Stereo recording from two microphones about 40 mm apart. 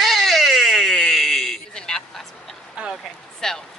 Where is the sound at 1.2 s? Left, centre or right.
Centre.